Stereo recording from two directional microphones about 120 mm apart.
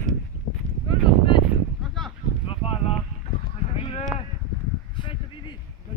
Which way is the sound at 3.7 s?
50° left (ahead or behind).